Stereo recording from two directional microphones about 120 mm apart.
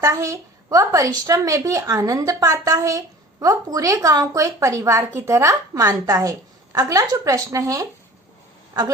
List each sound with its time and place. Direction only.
0.0 s a woman's voice: 25° right (ahead or behind)